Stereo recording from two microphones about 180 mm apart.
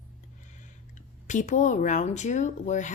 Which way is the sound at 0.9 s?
45° left (ahead or behind).